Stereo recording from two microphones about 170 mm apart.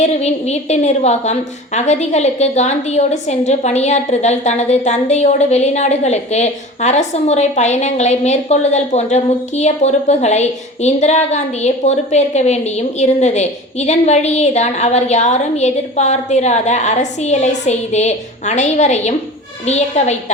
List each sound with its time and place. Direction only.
0.0 s a woman's voice: 40° left (ahead or behind)